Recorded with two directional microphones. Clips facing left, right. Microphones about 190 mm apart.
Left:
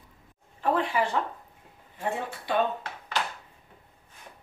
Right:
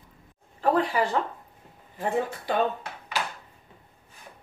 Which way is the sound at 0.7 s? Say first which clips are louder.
Right 2 dB; 40° right (ahead or behind).